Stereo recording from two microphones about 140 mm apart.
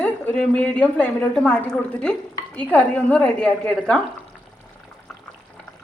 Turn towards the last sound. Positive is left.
turn(degrees=10)  # may be behind; listen again after turning